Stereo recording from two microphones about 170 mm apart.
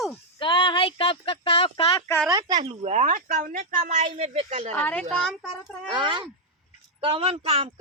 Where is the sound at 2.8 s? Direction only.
45° right (ahead or behind).